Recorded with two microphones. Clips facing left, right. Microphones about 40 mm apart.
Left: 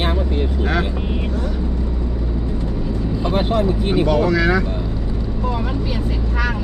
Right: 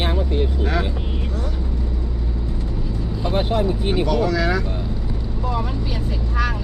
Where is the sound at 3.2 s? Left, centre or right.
Left.